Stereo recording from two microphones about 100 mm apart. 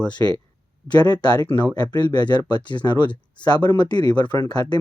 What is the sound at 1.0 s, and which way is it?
Speech, 40° left (ahead or behind).